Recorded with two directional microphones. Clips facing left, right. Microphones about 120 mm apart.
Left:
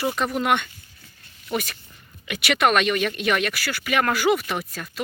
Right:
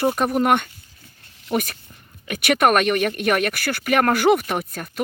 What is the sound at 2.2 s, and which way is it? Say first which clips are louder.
Speech: right 3 dB; 50° right (ahead or behind).